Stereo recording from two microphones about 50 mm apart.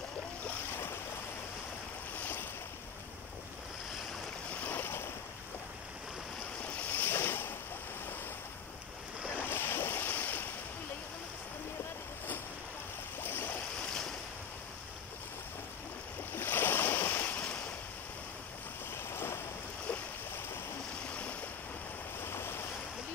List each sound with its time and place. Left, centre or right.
2.1 s waves: left
4.6 s waves: left
6.6 s waves: left
7.1 s boat: left
9.3 s waves: left
13.2 s boat: left
16.3 s waves: left
19.0 s rain: left
22.2 s waves: left